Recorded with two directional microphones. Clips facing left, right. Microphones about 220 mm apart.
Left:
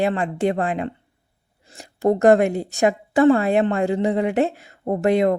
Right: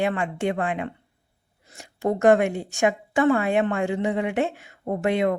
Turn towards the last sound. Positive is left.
turn(degrees=40)  # may be behind; listen again after turning